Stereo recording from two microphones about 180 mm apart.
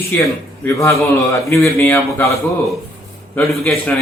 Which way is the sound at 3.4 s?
Centre (ahead or behind).